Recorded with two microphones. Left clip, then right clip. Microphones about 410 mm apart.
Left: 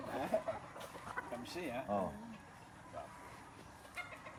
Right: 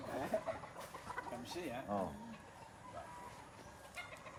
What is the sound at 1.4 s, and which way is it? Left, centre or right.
Speech, left.